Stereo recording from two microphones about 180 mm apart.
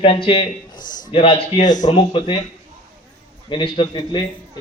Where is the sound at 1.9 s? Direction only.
30° left (ahead or behind).